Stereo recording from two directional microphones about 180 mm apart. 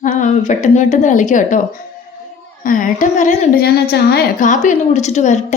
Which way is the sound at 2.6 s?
45° left (ahead or behind).